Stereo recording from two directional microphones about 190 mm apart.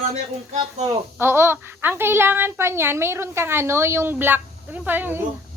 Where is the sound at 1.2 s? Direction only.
10° right (ahead or behind).